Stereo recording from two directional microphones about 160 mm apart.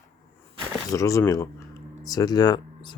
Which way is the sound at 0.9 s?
20° left (ahead or behind).